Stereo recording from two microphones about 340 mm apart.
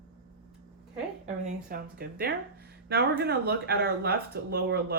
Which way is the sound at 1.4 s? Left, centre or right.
Right.